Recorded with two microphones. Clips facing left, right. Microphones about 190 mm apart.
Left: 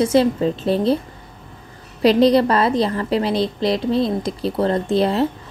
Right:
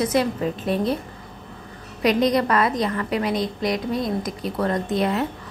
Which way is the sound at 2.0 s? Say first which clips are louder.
Left 6 dB; 30° left (ahead or behind).